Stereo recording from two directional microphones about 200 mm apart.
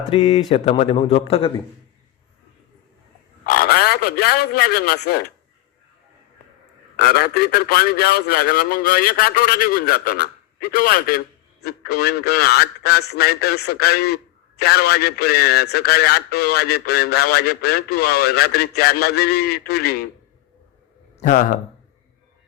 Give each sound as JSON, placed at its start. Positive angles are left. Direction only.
{"t": 0.1, "sound": "speech", "side_deg": 25}
{"t": 0.7, "sound": "speech", "side_deg": 35}
{"t": 3.4, "sound": "a man's voice", "side_deg": 50}
{"t": 6.9, "sound": "a man's voice", "side_deg": 50}
{"t": 21.2, "sound": "speech", "side_deg": 40}